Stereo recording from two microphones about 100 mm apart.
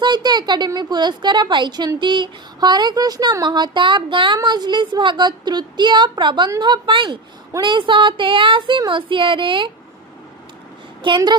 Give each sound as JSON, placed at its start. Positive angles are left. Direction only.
{"t": 0.0, "sound": "a woman's voice", "side_deg": -45}
{"t": 11.0, "sound": "speech", "side_deg": -55}